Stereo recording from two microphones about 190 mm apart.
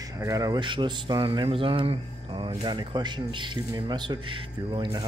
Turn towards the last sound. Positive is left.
turn(degrees=-25)  # may be behind; listen again after turning